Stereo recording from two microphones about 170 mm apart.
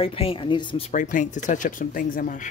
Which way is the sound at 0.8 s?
50° left (ahead or behind).